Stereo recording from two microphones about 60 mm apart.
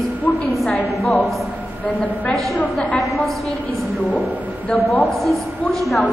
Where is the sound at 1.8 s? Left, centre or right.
Left.